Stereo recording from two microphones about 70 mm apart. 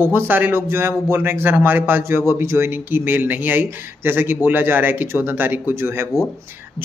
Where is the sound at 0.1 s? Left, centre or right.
Right.